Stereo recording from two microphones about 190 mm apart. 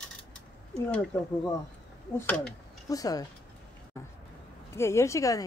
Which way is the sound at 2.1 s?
5° left (ahead or behind).